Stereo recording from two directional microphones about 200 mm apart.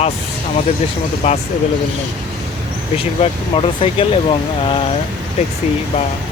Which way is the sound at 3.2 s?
25° left (ahead or behind).